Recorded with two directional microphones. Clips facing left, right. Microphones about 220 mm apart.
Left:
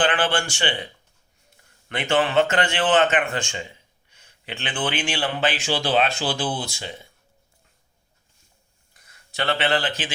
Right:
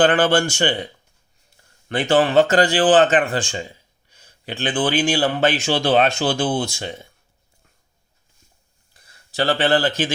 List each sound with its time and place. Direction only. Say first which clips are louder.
0.0 s speech: right 6 dB; 40° right (ahead or behind)
1.9 s speech: right 5 dB; 35° right (ahead or behind)
8.9 s a sound: right 2 dB; 30° right (ahead or behind)